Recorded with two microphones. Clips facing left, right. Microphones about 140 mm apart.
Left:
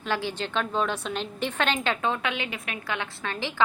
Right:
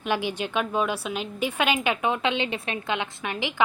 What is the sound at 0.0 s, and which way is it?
A woman's voice, 15° right (ahead or behind).